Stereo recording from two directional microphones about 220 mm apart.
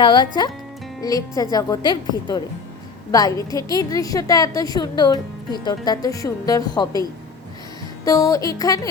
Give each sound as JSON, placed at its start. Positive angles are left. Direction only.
{"t": 0.0, "sound": "a woman's voice", "side_deg": 20}
{"t": 8.0, "sound": "a woman's voice", "side_deg": 15}